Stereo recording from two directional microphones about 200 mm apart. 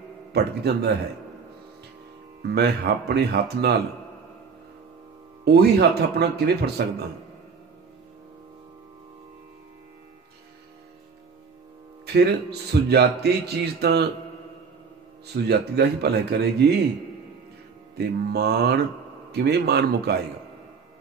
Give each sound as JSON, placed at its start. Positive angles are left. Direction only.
{"t": 0.3, "sound": "speech", "side_deg": -55}
{"t": 2.4, "sound": "speech", "side_deg": -55}
{"t": 5.4, "sound": "speech", "side_deg": -55}
{"t": 12.1, "sound": "speech", "side_deg": -55}
{"t": 15.3, "sound": "speech", "side_deg": -55}
{"t": 17.9, "sound": "speech", "side_deg": -55}